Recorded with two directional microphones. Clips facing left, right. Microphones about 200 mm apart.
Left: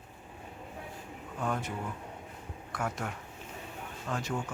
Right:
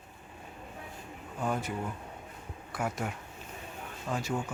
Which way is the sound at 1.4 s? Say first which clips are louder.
Right 2 dB; 5° right (ahead or behind).